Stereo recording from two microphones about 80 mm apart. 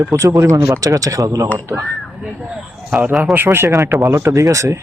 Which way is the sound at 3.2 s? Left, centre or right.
Right.